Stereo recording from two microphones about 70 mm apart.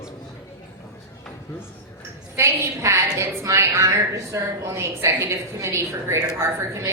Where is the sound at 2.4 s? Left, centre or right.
Right.